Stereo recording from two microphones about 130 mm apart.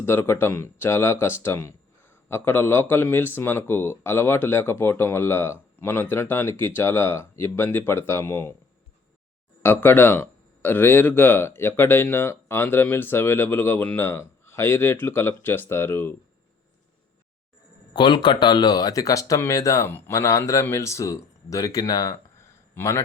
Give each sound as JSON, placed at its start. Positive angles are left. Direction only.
{"t": 0.0, "sound": "speech", "side_deg": 20}
{"t": 9.6, "sound": "speech", "side_deg": 15}
{"t": 17.9, "sound": "a man's voice", "side_deg": 35}